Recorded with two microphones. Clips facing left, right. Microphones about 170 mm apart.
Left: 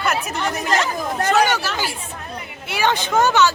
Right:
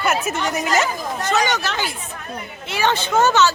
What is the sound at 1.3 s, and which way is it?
Speech, 10° left (ahead or behind).